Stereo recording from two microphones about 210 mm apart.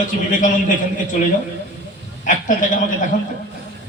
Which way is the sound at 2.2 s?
40° left (ahead or behind).